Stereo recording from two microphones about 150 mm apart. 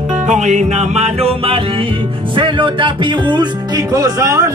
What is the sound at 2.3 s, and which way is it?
Speech, 35° right (ahead or behind).